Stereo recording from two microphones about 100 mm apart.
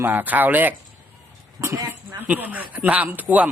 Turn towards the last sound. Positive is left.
turn(degrees=-15)  # may be behind; listen again after turning